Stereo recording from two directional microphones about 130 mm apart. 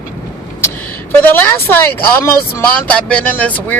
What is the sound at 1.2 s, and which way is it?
Speech, 15° left (ahead or behind).